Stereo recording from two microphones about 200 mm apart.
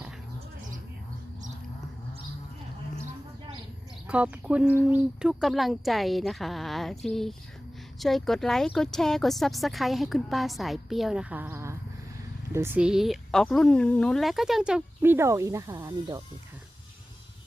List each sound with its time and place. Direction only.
4.0 s speech: 5° right (ahead or behind)